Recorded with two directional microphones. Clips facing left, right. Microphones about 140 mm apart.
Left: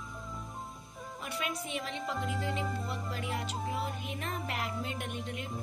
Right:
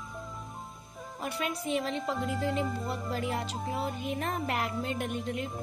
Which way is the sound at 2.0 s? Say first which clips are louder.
Right 4 dB; centre (ahead or behind).